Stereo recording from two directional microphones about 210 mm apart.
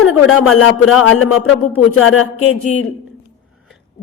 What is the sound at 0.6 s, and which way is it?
A man's voice, 80° left.